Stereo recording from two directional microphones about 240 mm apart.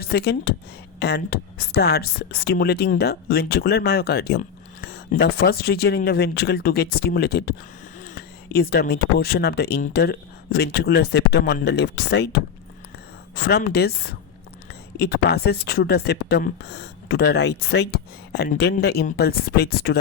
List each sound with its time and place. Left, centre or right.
0.0 s speech: left